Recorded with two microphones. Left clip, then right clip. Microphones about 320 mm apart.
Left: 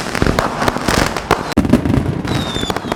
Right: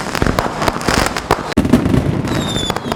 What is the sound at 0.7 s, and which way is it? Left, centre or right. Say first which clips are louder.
Fireworks: even; right.